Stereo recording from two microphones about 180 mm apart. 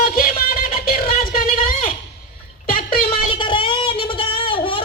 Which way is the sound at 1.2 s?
50° left (ahead or behind).